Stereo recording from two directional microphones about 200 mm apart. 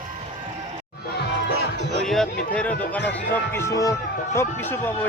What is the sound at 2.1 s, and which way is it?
Speech, 5° left (ahead or behind).